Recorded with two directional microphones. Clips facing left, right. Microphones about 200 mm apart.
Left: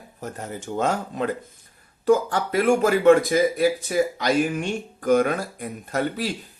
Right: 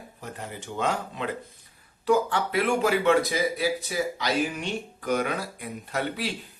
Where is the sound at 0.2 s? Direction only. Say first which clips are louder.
Left 5 dB; 45° left (ahead or behind).